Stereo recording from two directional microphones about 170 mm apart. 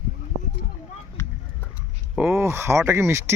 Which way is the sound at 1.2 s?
15° left (ahead or behind).